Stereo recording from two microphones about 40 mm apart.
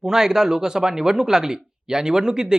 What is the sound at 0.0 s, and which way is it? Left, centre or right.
Speech, centre.